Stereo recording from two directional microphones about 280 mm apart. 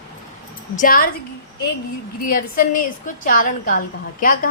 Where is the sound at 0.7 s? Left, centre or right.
Left.